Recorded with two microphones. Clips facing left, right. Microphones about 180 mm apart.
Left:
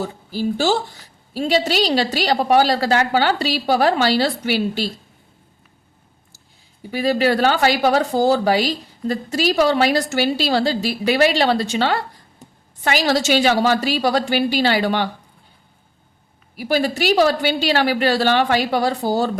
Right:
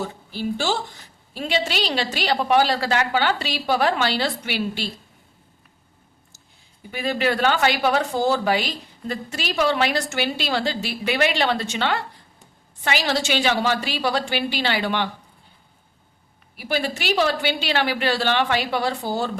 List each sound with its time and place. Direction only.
0.3 s speech: 40° left (ahead or behind)
6.9 s speech: 35° left (ahead or behind)
16.6 s speech: 40° left (ahead or behind)